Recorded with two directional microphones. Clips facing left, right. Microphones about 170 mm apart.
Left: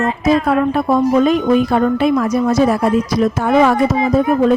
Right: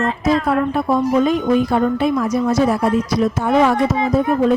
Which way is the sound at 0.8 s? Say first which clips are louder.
Left 3 dB; 60° left (ahead or behind).